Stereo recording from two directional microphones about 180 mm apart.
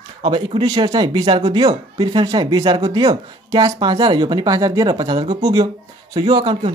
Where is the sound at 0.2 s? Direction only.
30° right (ahead or behind).